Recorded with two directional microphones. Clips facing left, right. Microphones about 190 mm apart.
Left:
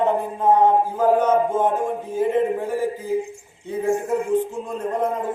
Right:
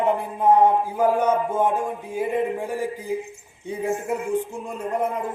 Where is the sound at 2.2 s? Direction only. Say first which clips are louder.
Left 4 dB; 15° right (ahead or behind).